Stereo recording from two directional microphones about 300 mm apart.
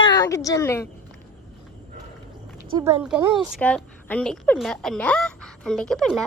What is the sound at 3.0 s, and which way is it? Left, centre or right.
Speech, centre.